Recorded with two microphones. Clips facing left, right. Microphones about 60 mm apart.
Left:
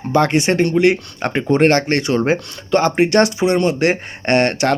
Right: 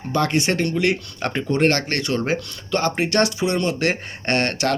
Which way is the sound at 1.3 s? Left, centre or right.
Left.